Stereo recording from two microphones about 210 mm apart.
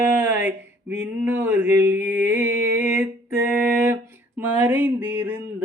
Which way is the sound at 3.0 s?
15° right (ahead or behind).